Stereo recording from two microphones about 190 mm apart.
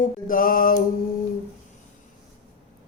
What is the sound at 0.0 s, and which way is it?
Music, 45° left (ahead or behind).